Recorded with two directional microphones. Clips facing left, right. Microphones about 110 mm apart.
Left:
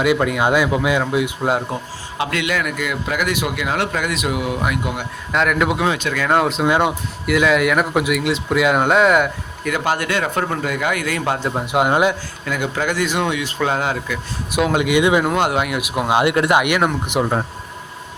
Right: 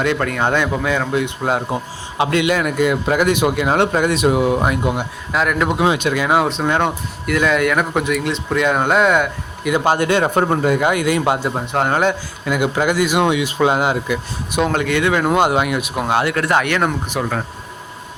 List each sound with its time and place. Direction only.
0.0 s speech: 10° left (ahead or behind)
1.7 s a man's voice: 25° right (ahead or behind)
5.3 s speech: centre (ahead or behind)
5.8 s speech: 15° right (ahead or behind)
6.3 s speech: centre (ahead or behind)
9.6 s a man's voice: 25° right (ahead or behind)
11.6 s speech: 10° left (ahead or behind)
12.5 s speech: 15° right (ahead or behind)
14.5 s speech: 5° left (ahead or behind)
15.3 s speech: centre (ahead or behind)
15.8 s speech: 10° left (ahead or behind)